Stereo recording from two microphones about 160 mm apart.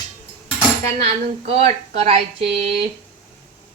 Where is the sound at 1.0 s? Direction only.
40° right (ahead or behind).